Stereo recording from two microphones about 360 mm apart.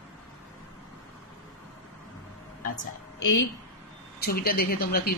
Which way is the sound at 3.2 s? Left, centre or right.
Left.